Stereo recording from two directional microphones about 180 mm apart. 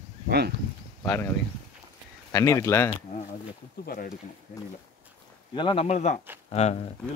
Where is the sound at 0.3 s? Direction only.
65° right (ahead or behind).